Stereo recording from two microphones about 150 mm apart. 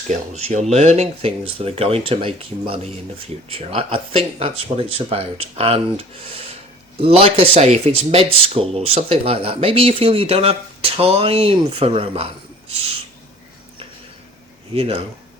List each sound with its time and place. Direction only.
0.1 s speech: 50° right (ahead or behind)
14.7 s speech: 40° right (ahead or behind)